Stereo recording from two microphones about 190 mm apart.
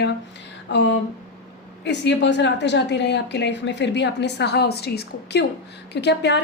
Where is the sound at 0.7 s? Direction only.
70° left (ahead or behind).